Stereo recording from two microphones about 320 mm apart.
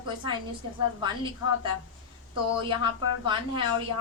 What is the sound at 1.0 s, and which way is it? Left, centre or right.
A woman's voice, centre.